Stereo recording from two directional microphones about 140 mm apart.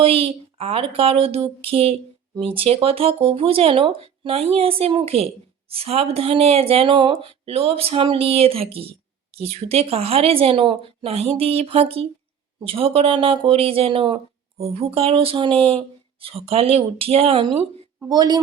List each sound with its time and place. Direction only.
0.0 s a woman's voice: 40° right (ahead or behind)
18.1 s a woman's voice: 30° right (ahead or behind)